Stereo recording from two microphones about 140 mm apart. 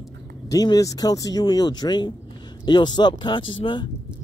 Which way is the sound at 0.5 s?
25° left (ahead or behind).